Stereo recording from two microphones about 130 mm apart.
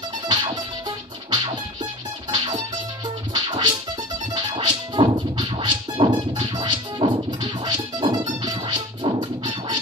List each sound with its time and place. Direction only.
0.3 s music: 35° right (ahead or behind)
3.3 s music: 35° right (ahead or behind)